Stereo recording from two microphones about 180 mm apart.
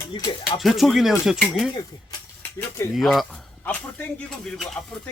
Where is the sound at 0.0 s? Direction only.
20° left (ahead or behind).